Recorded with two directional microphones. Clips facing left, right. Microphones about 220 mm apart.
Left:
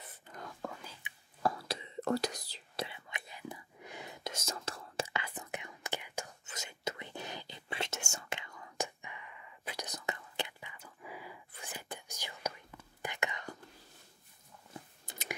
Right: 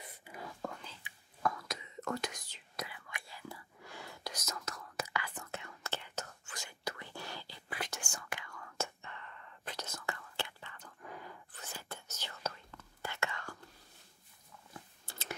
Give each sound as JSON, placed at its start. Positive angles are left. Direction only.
{"t": 0.2, "sound": "whispering", "side_deg": -5}
{"t": 1.4, "sound": "whispering", "side_deg": 30}
{"t": 15.0, "sound": "clicking", "side_deg": 15}